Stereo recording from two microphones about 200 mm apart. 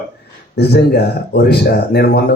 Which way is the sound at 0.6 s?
55° left (ahead or behind).